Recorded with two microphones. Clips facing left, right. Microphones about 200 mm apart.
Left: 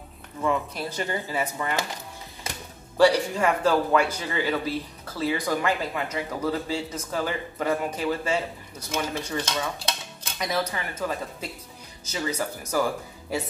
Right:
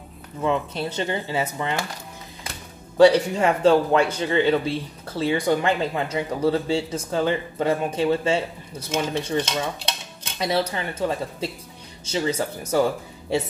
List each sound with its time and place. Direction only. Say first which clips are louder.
0.4 s a man's voice: right 3 dB; 25° right (ahead or behind)
3.0 s a man's voice: right 5 dB; 25° right (ahead or behind)